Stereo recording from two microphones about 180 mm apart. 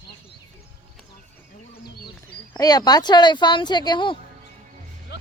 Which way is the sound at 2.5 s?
20° left (ahead or behind).